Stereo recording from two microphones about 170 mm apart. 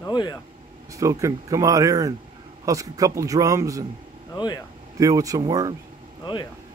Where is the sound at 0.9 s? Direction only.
20° right (ahead or behind).